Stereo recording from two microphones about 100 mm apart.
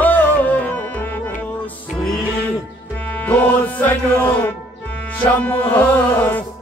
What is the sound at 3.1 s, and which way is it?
Music, 15° left (ahead or behind).